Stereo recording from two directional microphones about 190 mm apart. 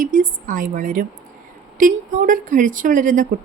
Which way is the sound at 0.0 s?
45° right (ahead or behind).